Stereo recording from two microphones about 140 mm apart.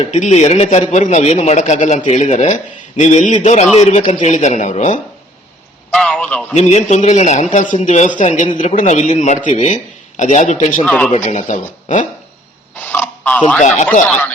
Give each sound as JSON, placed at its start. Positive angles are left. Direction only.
{"t": 0.0, "sound": "a man's voice", "side_deg": 50}
{"t": 5.9, "sound": "a man's voice", "side_deg": 5}
{"t": 6.6, "sound": "a man's voice", "side_deg": 55}
{"t": 7.5, "sound": "a man's voice", "side_deg": 65}
{"t": 10.8, "sound": "speech", "side_deg": 10}
{"t": 11.1, "sound": "a man's voice", "side_deg": 55}
{"t": 12.7, "sound": "a sound", "side_deg": 10}